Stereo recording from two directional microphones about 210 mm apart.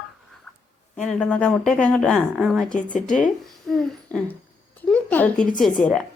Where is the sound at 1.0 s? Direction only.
5° left (ahead or behind).